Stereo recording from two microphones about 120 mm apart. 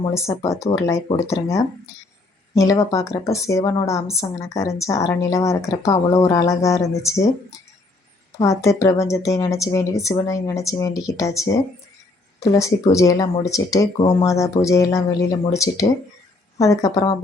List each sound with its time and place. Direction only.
0.1 s speech: 25° left (ahead or behind)
8.4 s speech: 25° left (ahead or behind)